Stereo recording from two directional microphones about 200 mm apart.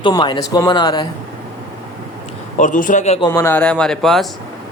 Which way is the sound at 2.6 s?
40° left (ahead or behind).